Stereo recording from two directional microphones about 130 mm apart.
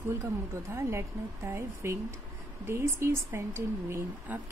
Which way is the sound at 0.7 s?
20° right (ahead or behind).